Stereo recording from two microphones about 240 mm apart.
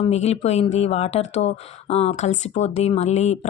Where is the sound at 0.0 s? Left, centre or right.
Left.